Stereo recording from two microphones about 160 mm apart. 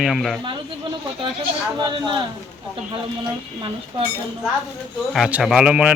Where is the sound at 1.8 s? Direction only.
30° right (ahead or behind).